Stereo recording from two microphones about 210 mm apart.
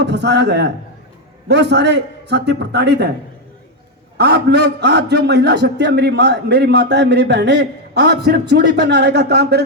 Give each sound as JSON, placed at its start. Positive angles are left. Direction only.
{"t": 0.0, "sound": "a man's voice", "side_deg": -55}
{"t": 4.2, "sound": "a man's voice", "side_deg": -50}